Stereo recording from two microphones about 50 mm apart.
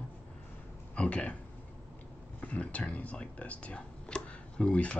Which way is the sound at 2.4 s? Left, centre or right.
Left.